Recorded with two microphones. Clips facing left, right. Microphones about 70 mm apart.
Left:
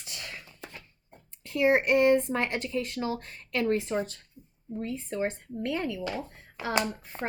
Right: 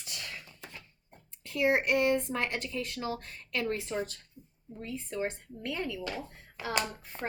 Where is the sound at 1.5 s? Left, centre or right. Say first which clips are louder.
Left 4 dB; left.